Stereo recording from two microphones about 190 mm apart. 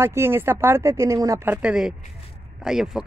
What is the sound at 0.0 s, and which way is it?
Speech, 15° right (ahead or behind).